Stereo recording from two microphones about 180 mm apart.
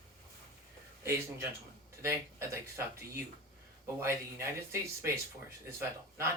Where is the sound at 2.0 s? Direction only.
15° right (ahead or behind).